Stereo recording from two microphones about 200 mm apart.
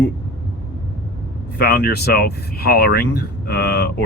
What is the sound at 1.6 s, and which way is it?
Speech, 50° left (ahead or behind).